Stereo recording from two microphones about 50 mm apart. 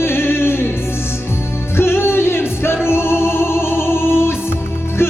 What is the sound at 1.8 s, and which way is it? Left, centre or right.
Music, left.